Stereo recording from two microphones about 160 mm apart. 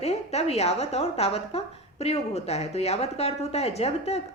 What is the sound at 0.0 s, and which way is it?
A woman's voice, 40° left (ahead or behind).